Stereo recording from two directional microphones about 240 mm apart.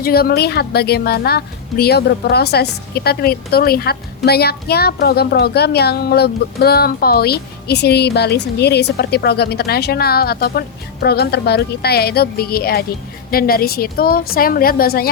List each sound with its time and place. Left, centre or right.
0.0 s a woman's voice: left